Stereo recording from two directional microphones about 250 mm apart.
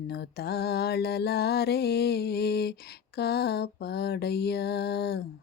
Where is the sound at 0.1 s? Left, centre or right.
Left.